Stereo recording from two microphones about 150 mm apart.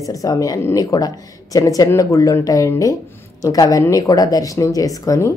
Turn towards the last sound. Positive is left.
turn(degrees=20)  # may be behind; listen again after turning